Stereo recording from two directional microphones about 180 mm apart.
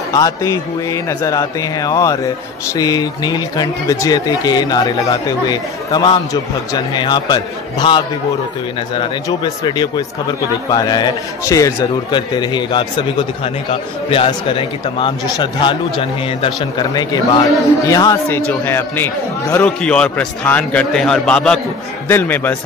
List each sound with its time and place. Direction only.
0.1 s a man's voice: 20° left (ahead or behind)